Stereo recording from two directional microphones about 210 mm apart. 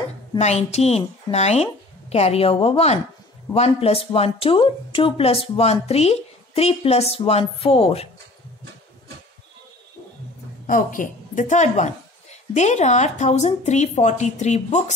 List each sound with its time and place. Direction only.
0.4 s speech: 30° left (ahead or behind)
10.7 s a woman's voice: 40° left (ahead or behind)